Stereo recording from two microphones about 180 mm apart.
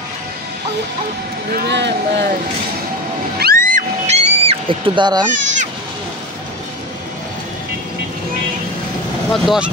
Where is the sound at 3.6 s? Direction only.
40° right (ahead or behind); by 5.2 s 25° right (ahead or behind).